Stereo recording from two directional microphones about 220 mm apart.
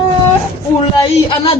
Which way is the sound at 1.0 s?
20° left (ahead or behind).